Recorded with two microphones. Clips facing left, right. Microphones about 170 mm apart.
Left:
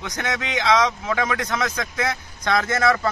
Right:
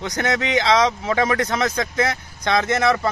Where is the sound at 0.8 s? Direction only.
30° right (ahead or behind).